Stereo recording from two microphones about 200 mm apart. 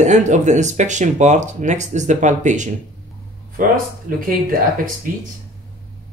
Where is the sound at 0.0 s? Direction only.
35° right (ahead or behind).